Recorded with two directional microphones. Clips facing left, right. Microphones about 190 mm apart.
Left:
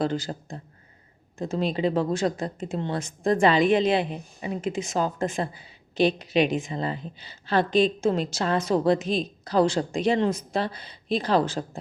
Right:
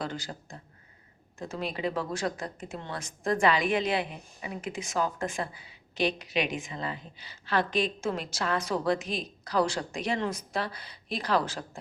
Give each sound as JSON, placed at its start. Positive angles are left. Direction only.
{"t": 0.0, "sound": "a woman's voice", "side_deg": 30}